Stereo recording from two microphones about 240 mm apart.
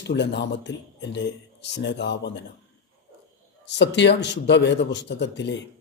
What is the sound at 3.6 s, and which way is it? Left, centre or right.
A man's voice, left.